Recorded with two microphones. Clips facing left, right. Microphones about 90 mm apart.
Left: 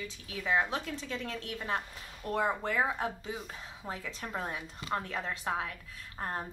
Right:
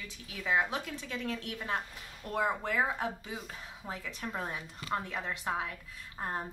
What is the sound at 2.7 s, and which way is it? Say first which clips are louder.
A woman's voice: even; centre (ahead or behind).